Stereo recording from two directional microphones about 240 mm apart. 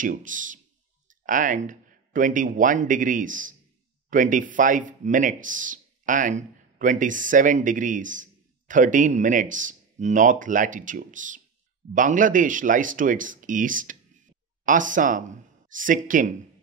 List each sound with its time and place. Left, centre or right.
0.0 s speech: right